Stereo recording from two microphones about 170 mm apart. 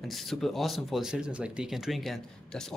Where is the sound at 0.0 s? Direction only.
Centre (ahead or behind).